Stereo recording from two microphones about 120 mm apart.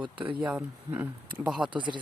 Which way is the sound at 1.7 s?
40° right (ahead or behind).